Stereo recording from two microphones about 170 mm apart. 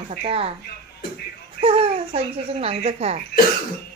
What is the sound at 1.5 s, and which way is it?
Speech, 35° right (ahead or behind).